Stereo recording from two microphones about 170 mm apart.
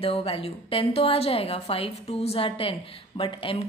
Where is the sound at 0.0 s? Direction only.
35° left (ahead or behind).